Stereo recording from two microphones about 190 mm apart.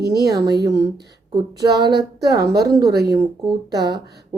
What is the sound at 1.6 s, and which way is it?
Speech, 60° right (ahead or behind).